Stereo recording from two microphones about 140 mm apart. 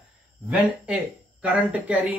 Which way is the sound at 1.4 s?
10° right (ahead or behind).